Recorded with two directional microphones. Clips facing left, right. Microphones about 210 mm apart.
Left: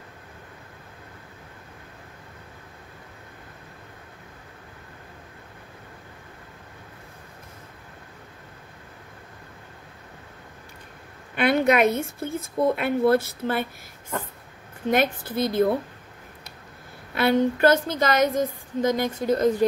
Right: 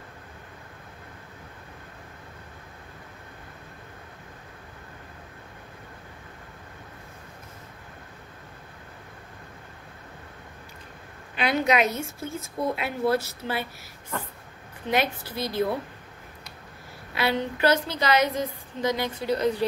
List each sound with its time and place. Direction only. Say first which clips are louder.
11.3 s a woman's voice: left 4 dB; 55° left (ahead or behind)
14.9 s a woman's voice: left 4 dB; 50° left (ahead or behind)
17.1 s a woman's voice: left 6 dB; 50° left (ahead or behind)